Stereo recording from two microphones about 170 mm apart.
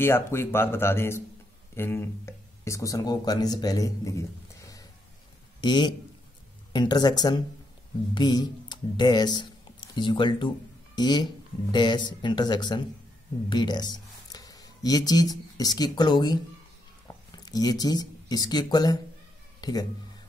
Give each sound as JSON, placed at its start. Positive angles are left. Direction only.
{"t": 0.0, "sound": "speech", "side_deg": 15}